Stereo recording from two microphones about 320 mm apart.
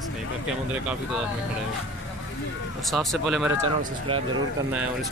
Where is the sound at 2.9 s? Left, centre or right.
Centre.